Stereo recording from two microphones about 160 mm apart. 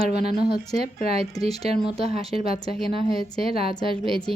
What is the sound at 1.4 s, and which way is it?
Speech, 40° right (ahead or behind).